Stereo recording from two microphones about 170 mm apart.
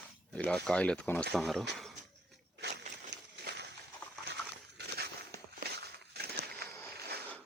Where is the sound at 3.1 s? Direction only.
90° right.